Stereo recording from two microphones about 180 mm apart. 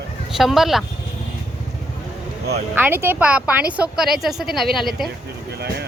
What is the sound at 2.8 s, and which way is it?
A woman's voice, 10° right (ahead or behind).